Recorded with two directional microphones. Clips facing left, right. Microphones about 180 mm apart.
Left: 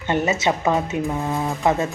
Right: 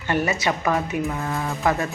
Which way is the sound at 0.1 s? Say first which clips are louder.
Left 2 dB; 20° left (ahead or behind).